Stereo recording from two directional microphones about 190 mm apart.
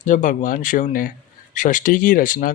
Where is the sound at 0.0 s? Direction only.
40° left (ahead or behind).